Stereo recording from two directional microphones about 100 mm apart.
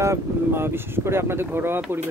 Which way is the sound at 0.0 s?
25° right (ahead or behind).